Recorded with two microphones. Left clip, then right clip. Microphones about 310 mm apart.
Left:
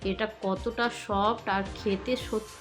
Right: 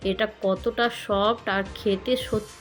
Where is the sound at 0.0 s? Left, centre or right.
Centre.